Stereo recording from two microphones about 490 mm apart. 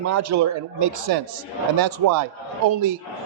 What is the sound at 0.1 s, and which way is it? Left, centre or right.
Speech, right.